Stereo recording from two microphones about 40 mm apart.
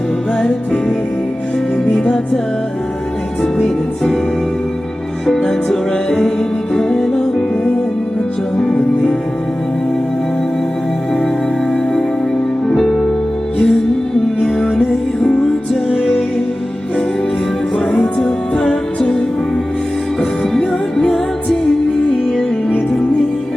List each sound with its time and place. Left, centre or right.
0.3 s music: centre
3.4 s music: centre
5.2 s music: centre
12.6 s music: centre
17.9 s music: centre
20.5 s music: centre